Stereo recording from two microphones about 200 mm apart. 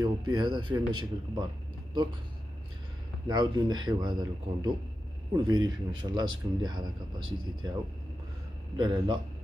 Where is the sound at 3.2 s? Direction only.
20° right (ahead or behind).